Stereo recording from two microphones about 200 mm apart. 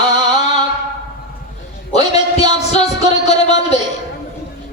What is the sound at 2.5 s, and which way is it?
Music, 35° left (ahead or behind).